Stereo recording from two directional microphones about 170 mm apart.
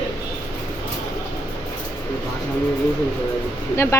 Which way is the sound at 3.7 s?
15° left (ahead or behind).